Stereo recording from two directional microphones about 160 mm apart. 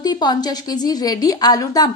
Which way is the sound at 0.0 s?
25° left (ahead or behind).